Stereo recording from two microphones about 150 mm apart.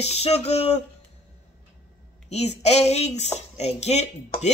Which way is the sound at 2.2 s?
45° left (ahead or behind).